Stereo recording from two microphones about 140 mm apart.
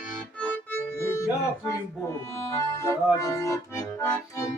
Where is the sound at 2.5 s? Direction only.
20° left (ahead or behind).